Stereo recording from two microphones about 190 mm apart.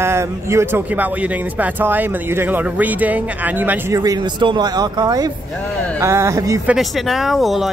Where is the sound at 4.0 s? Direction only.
20° right (ahead or behind).